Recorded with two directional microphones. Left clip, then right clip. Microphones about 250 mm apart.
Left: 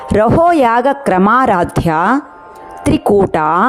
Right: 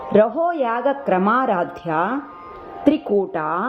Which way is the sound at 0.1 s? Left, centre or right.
Left.